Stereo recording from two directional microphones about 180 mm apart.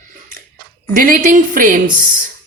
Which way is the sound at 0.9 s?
50° right (ahead or behind).